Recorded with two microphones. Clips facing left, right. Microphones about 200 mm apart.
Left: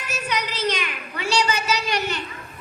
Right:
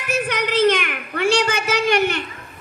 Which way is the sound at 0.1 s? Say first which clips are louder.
Right 7 dB; 55° right (ahead or behind).